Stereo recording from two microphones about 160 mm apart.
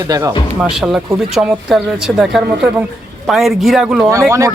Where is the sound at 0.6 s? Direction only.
5° right (ahead or behind).